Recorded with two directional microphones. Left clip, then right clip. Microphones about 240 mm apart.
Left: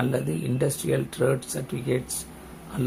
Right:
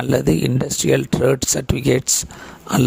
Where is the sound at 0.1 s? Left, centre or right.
Right.